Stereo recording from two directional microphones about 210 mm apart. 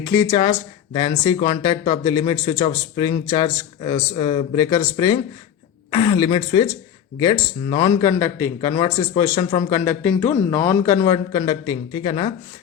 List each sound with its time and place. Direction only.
0.0 s a man's voice: 15° left (ahead or behind)